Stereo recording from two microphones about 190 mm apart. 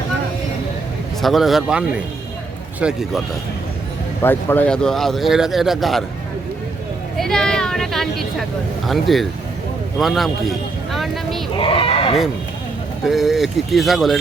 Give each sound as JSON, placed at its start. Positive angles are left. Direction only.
{"t": 1.2, "sound": "speech", "side_deg": 0}
{"t": 2.8, "sound": "speech", "side_deg": 0}
{"t": 4.2, "sound": "speech", "side_deg": 10}
{"t": 7.2, "sound": "a sound", "side_deg": 5}
{"t": 8.9, "sound": "speech", "side_deg": 0}
{"t": 10.9, "sound": "a sound", "side_deg": 0}
{"t": 11.5, "sound": "speech", "side_deg": 25}
{"t": 13.1, "sound": "speech", "side_deg": 0}